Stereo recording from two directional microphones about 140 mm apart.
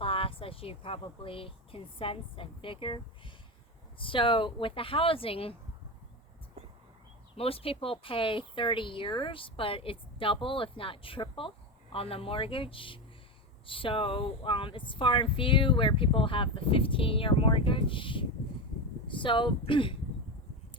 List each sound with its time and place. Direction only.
0.0 s a woman's voice: 40° left (ahead or behind)
7.3 s speech: 45° left (ahead or behind)